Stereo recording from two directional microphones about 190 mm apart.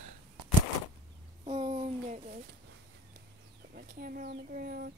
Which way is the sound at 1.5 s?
35° right (ahead or behind).